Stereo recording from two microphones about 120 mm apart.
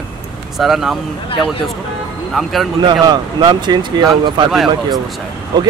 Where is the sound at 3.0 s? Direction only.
35° right (ahead or behind).